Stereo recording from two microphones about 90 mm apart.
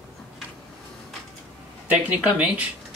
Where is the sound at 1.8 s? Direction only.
15° right (ahead or behind).